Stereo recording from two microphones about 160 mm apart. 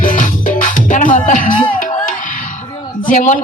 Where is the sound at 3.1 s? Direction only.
55° left (ahead or behind).